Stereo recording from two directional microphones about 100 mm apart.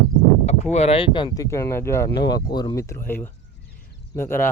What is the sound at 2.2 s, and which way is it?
Speech, 45° left (ahead or behind).